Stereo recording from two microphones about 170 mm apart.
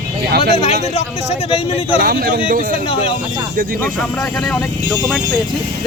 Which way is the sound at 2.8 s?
35° left (ahead or behind).